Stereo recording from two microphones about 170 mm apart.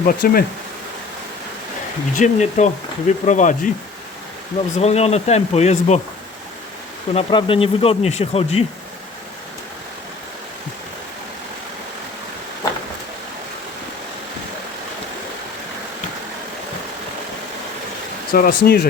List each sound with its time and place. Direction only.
0.0 s speech: 60° left (ahead or behind)
2.1 s speech: 45° left (ahead or behind)
4.7 s speech: 40° left (ahead or behind)
7.1 s speech: 30° left (ahead or behind)
18.3 s speech: 55° left (ahead or behind)